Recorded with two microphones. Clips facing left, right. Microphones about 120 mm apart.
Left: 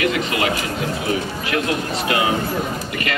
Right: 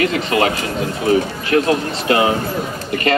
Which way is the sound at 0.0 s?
35° right (ahead or behind).